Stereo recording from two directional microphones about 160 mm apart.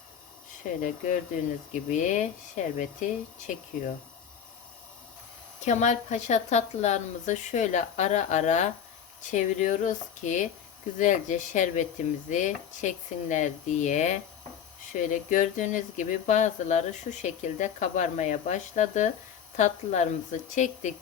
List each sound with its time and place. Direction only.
0.8 s speech: 50° left (ahead or behind)
5.5 s speech: 50° left (ahead or behind)